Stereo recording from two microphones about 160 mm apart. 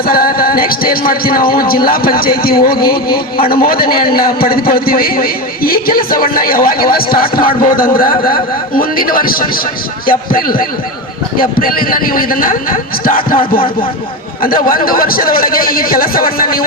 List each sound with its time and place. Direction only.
0.0 s a man's voice: 65° left (ahead or behind)
14.4 s a man's voice: 65° left (ahead or behind)